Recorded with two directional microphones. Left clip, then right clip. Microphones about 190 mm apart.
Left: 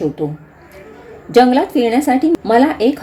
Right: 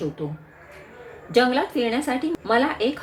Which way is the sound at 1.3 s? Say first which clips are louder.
Left 9 dB; 35° left (ahead or behind).